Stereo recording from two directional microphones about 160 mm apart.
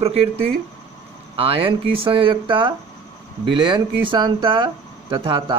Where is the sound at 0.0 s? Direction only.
40° right (ahead or behind).